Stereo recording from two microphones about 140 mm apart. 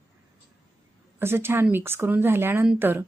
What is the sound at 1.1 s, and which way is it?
Speech, 15° right (ahead or behind).